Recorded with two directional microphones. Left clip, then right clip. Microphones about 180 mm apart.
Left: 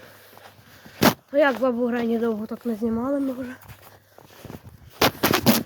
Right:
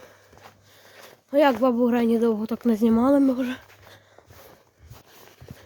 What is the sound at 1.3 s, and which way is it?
Speech, 35° right (ahead or behind).